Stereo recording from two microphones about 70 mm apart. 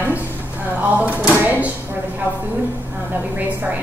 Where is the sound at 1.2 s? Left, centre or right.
Right.